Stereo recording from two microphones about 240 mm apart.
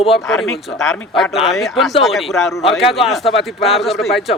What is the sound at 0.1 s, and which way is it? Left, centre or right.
A man's voice, centre.